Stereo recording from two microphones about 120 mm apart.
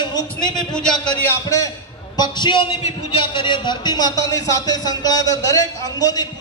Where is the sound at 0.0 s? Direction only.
35° left (ahead or behind).